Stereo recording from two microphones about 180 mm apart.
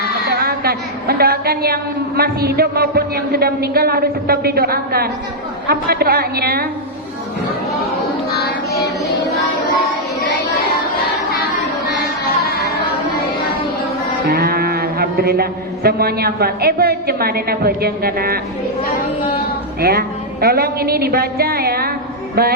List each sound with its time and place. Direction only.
0.3 s a woman's voice: 60° right (ahead or behind)
8.3 s child singing: 60° left (ahead or behind)
14.3 s a man's voice: 60° right (ahead or behind)
19.8 s a woman's voice: 55° right (ahead or behind)